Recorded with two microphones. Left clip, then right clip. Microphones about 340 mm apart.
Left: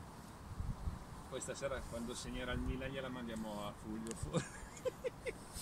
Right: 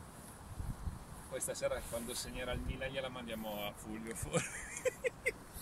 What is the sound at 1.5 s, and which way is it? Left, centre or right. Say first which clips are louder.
Speech: right 5 dB; right.